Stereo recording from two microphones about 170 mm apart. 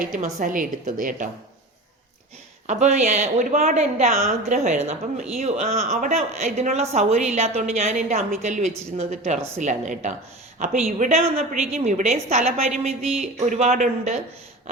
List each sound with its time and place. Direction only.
0.0 s a woman's voice: 50° right (ahead or behind)
2.6 s a woman's voice: 45° right (ahead or behind)
11.3 s a woman's voice: 40° right (ahead or behind)